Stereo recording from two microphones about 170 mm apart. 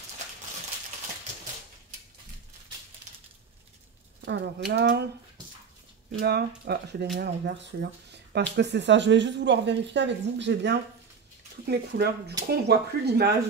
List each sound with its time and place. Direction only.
4.2 s speech: 85° right
6.2 s speech: 70° right (ahead or behind)
7.2 s speech: 85° right
11.6 s speech: 70° right (ahead or behind)